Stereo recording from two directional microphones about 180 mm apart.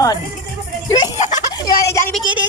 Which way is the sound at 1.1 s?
40° left (ahead or behind).